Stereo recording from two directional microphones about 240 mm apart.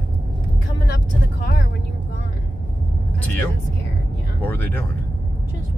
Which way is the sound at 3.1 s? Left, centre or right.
Centre.